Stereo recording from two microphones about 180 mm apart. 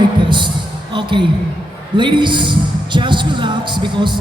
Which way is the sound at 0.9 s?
25° right (ahead or behind).